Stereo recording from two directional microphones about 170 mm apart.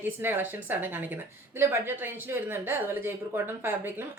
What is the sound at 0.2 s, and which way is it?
A woman's voice, 10° right (ahead or behind).